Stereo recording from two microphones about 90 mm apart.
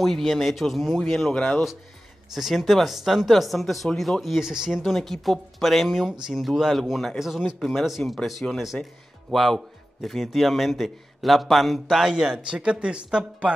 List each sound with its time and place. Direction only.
0.0 s speech: centre (ahead or behind)